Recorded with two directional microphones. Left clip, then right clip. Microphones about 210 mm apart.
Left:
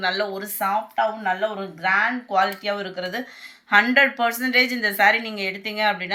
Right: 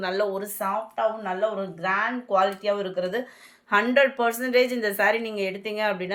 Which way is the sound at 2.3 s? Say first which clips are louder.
Right 2 dB; 60° right (ahead or behind).